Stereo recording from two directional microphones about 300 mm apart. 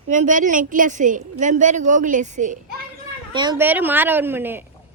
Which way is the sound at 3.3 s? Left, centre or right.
Centre.